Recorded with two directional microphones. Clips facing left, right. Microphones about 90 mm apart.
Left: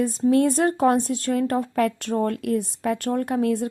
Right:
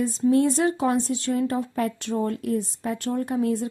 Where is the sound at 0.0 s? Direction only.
60° left (ahead or behind).